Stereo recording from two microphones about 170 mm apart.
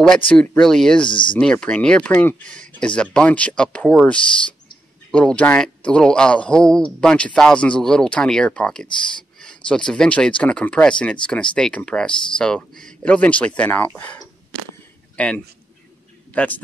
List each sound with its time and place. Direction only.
0.0 s a man's voice: 5° left (ahead or behind)
1.0 s speech: 30° left (ahead or behind)
1.3 s a man's voice: 5° left (ahead or behind)
15.1 s a man's voice: 5° left (ahead or behind)